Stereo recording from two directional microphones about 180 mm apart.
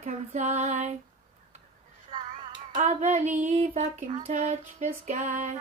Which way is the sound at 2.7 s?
40° right (ahead or behind).